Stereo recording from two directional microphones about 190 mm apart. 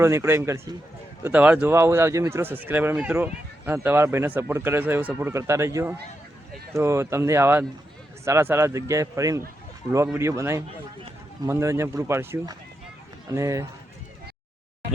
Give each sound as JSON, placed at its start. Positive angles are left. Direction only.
{"t": 0.0, "sound": "speech", "side_deg": -15}